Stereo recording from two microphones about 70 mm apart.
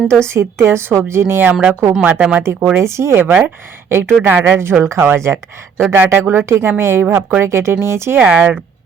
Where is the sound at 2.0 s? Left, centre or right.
Centre.